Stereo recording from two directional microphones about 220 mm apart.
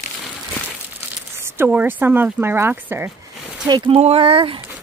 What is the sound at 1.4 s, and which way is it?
Speech, 10° right (ahead or behind).